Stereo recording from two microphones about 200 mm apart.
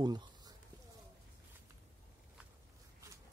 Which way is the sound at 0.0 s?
20° right (ahead or behind).